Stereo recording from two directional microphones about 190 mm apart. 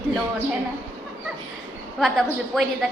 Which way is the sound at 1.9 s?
Centre (ahead or behind).